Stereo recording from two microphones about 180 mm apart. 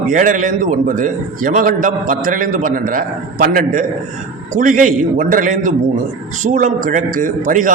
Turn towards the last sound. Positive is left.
turn(degrees=-45)  # may be behind; listen again after turning